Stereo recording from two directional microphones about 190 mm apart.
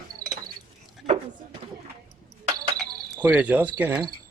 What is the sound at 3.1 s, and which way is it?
Speech, 10° right (ahead or behind).